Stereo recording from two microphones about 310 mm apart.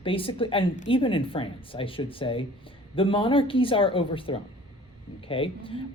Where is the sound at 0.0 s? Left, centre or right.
Centre.